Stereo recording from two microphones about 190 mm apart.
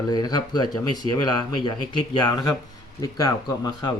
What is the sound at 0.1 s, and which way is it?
Speech, 20° left (ahead or behind).